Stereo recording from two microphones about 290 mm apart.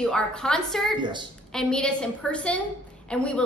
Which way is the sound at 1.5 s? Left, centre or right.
Centre.